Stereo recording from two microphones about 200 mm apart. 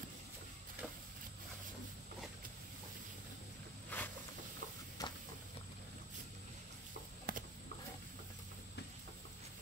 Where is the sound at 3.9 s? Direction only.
10° left (ahead or behind).